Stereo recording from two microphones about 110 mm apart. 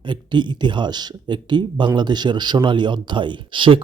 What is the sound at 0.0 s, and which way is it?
Speech, 45° right (ahead or behind).